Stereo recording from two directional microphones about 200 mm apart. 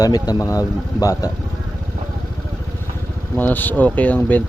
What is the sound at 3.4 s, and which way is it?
Speech, 10° left (ahead or behind).